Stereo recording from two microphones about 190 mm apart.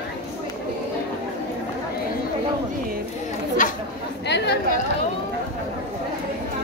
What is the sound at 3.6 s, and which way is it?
Chatter, 45° left (ahead or behind).